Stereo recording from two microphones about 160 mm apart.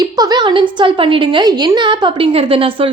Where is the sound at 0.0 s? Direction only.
25° right (ahead or behind).